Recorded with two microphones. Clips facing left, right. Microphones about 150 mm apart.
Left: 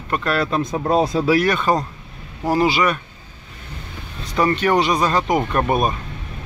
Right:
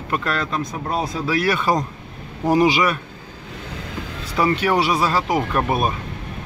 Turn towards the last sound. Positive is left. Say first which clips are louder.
# left 2 dB
turn(degrees=0)  # may be behind; listen again after turning